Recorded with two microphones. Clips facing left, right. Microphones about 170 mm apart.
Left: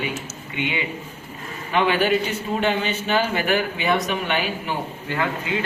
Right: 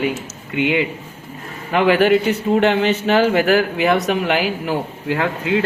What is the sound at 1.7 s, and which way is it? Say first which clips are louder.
A man's voice: right 6 dB; 85° right.